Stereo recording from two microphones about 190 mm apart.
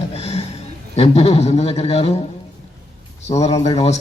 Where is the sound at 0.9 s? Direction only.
35° left (ahead or behind).